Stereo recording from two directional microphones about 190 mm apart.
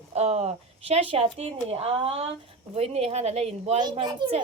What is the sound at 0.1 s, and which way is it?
Speech, 35° right (ahead or behind).